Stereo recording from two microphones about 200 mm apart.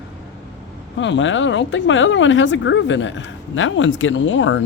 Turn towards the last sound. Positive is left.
turn(degrees=65)  # may be behind; listen again after turning